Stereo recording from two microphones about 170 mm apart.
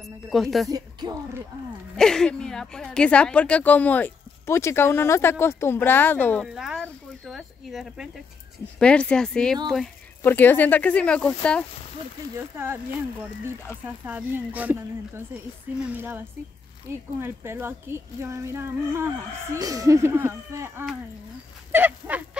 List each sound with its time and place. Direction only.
0.0 s speech: centre (ahead or behind)
0.7 s speech: 20° right (ahead or behind)
2.0 s a woman's voice: 5° left (ahead or behind)
6.4 s a sound: 5° right (ahead or behind)
8.7 s a woman's voice: 5° left (ahead or behind)
12.4 s speech: 15° right (ahead or behind)
13.8 s speech: 10° right (ahead or behind)
17.2 s speech: 15° right (ahead or behind)